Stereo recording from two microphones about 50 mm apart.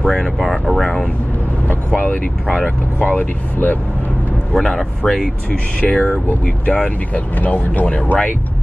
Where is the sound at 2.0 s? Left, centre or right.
Left.